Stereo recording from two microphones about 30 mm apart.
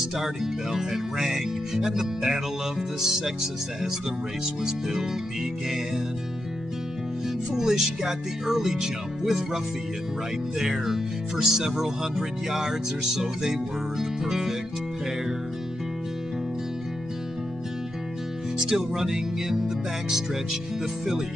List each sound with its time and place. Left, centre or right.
0.2 s speech: centre
4.6 s speech: centre
7.5 s speech: centre
10.6 s speech: centre
18.7 s speech: centre